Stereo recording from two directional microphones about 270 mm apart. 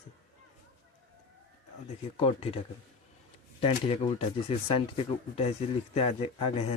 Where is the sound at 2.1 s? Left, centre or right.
Left.